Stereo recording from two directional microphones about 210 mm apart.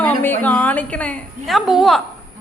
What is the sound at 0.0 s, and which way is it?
A woman's voice, 10° left (ahead or behind).